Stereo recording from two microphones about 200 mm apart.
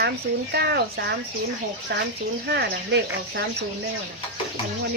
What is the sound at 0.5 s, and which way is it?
Speech, 55° right (ahead or behind).